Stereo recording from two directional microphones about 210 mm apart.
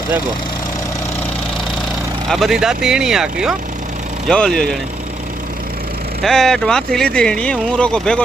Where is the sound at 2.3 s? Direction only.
Centre (ahead or behind).